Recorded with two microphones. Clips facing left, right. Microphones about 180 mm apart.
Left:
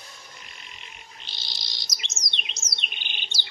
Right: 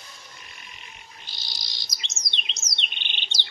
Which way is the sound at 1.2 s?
25° left (ahead or behind).